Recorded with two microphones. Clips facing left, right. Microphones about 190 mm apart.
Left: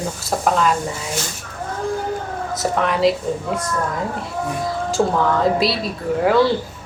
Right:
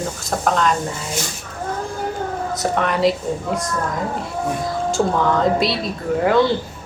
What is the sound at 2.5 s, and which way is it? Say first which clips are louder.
Speech: left 1 dB; centre (ahead or behind).